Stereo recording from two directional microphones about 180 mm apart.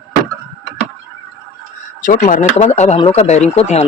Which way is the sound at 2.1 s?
45° left (ahead or behind).